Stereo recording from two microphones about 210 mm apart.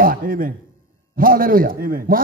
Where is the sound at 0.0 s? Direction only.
40° right (ahead or behind).